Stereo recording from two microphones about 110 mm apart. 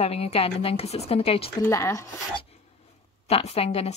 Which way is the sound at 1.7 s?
25° left (ahead or behind).